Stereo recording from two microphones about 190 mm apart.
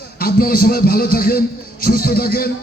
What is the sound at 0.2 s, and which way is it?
A man's voice, 50° left (ahead or behind).